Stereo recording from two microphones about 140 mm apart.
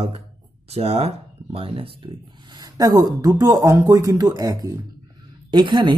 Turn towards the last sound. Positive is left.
turn(degrees=-35)  # may be behind; listen again after turning